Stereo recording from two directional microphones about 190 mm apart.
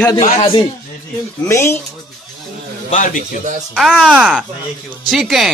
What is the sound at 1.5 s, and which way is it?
Speech, 15° left (ahead or behind).